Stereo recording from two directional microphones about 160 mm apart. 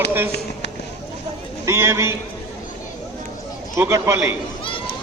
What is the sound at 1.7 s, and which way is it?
Speech, 15° right (ahead or behind).